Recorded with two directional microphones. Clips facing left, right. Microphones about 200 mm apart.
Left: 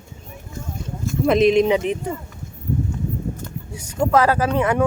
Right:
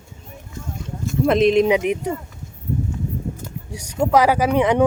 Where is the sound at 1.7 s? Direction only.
10° right (ahead or behind).